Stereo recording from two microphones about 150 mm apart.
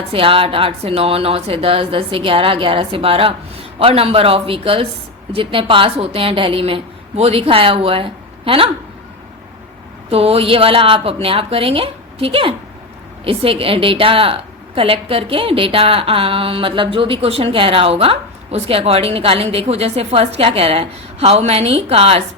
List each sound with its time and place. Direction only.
0.1 s a woman's voice: 40° right (ahead or behind)
10.1 s a woman's voice: 40° right (ahead or behind)